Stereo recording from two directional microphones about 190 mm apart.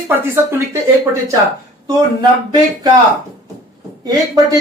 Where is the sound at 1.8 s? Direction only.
20° right (ahead or behind).